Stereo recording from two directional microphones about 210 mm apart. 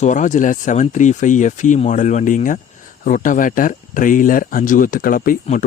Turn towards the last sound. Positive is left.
turn(degrees=40)  # may be behind; listen again after turning